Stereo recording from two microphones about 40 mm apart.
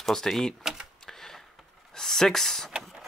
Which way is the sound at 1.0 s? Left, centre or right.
Centre.